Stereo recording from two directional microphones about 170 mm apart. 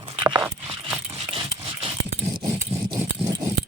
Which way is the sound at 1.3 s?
30° right (ahead or behind).